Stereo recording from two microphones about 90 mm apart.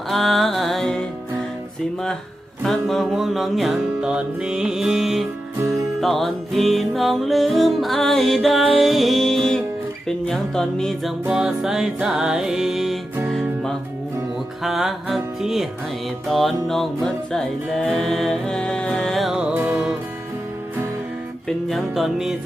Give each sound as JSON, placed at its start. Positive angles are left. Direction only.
{"t": 0.1, "sound": "music", "side_deg": 0}
{"t": 2.6, "sound": "music", "side_deg": 0}
{"t": 11.3, "sound": "music", "side_deg": -10}
{"t": 14.6, "sound": "music", "side_deg": -5}
{"t": 19.5, "sound": "music", "side_deg": -25}
{"t": 21.4, "sound": "music", "side_deg": 5}